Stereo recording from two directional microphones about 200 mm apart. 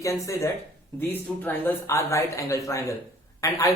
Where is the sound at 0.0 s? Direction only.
15° left (ahead or behind).